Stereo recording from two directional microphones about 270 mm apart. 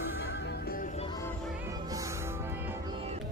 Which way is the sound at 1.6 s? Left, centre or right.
Centre.